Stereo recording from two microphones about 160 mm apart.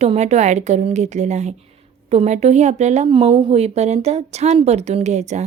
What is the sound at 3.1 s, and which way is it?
A woman's voice, 35° right (ahead or behind).